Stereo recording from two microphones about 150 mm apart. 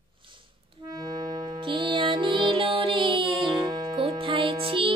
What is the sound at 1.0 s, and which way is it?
Music, 30° right (ahead or behind).